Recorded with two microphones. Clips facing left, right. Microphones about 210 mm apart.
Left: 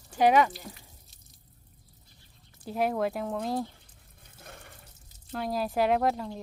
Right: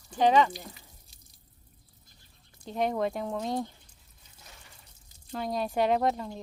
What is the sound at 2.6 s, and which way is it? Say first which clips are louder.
Speech: left 1 dB; 5° left (ahead or behind).